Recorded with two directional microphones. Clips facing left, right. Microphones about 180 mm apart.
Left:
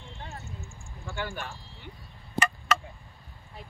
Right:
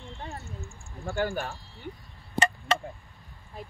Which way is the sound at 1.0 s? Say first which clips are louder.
Right 6 dB; 45° right (ahead or behind).